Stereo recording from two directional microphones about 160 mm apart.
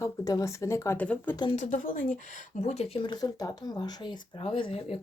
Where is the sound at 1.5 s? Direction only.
50° left (ahead or behind).